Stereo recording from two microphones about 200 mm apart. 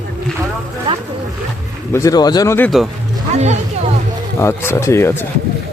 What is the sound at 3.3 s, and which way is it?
Speech, 35° right (ahead or behind).